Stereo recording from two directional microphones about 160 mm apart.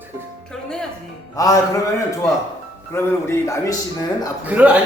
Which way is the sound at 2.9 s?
15° left (ahead or behind).